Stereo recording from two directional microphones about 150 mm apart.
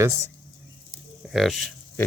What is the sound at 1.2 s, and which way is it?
Speech, centre (ahead or behind).